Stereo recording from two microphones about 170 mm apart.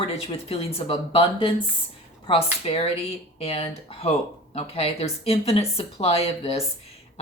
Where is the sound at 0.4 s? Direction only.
35° left (ahead or behind).